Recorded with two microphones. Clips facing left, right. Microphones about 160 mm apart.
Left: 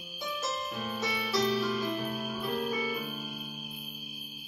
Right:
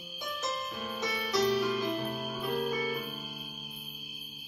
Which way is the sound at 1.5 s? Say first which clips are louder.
Right 1 dB; 15° right (ahead or behind).